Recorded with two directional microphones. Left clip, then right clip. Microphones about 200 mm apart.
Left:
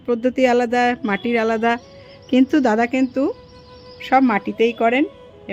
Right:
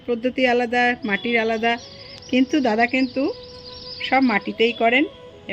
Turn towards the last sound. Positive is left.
turn(degrees=10)  # may be behind; listen again after turning